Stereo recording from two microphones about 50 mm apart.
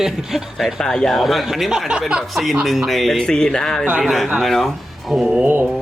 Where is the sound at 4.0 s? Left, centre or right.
Centre.